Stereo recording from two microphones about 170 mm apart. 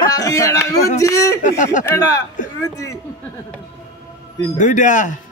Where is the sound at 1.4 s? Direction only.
45° left (ahead or behind).